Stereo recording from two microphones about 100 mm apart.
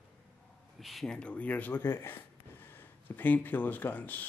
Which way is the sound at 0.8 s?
Centre (ahead or behind).